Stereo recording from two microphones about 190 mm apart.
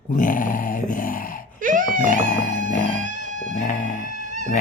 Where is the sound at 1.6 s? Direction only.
45° right (ahead or behind).